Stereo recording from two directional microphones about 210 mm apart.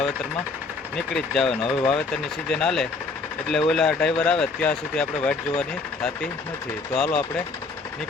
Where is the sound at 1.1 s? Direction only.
Centre (ahead or behind).